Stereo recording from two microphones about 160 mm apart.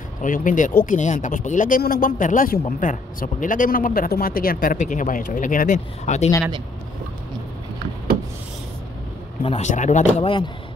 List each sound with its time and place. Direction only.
0.2 s speech: 55° left (ahead or behind)
9.4 s speech: 40° left (ahead or behind)